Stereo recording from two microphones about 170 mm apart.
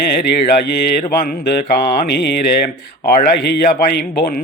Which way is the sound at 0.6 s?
65° left (ahead or behind).